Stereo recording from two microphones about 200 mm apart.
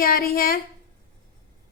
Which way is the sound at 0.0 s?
45° left (ahead or behind).